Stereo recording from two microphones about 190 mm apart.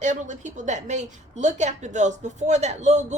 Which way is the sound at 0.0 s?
40° right (ahead or behind).